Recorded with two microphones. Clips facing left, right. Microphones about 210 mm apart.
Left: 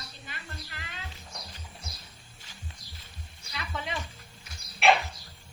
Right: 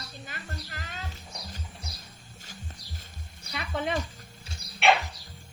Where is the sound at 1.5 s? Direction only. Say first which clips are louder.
Right 3 dB; 45° right (ahead or behind).